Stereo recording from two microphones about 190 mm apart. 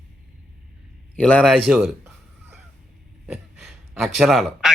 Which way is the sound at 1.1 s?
5° left (ahead or behind).